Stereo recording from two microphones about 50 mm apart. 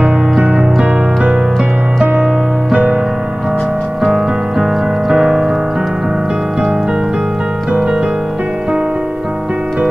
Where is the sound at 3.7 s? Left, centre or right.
Centre.